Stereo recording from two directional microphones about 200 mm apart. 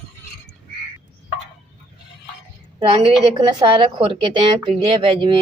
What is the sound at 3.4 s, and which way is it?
A woman's voice, 25° right (ahead or behind).